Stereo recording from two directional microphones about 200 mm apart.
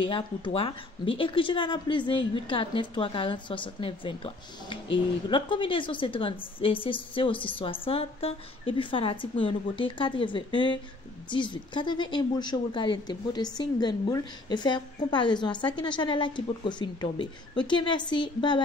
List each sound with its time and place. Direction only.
0.0 s a woman's voice: 25° left (ahead or behind)